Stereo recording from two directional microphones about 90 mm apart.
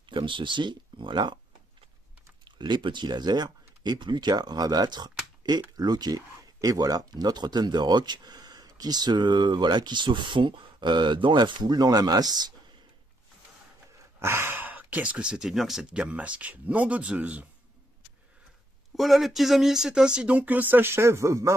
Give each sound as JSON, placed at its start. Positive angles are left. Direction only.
{"t": 0.1, "sound": "speech", "side_deg": -65}
{"t": 2.4, "sound": "speech", "side_deg": -60}
{"t": 14.2, "sound": "speech", "side_deg": -25}
{"t": 18.9, "sound": "speech", "side_deg": 0}